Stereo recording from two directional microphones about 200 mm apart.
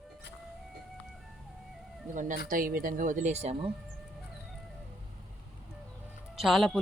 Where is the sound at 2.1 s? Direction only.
40° right (ahead or behind).